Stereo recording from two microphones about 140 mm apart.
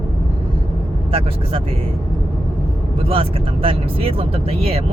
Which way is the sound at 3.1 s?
40° right (ahead or behind).